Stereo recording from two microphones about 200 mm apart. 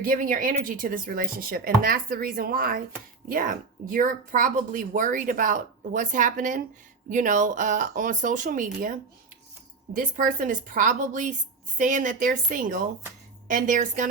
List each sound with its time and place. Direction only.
0.0 s speech: 45° right (ahead or behind)